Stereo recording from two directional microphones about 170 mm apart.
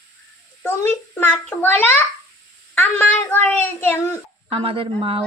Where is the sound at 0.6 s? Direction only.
15° left (ahead or behind).